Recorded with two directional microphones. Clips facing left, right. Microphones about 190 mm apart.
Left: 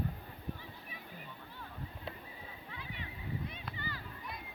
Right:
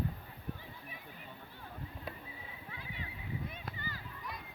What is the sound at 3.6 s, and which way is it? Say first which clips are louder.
Run: left 1 dB; 45° right (ahead or behind).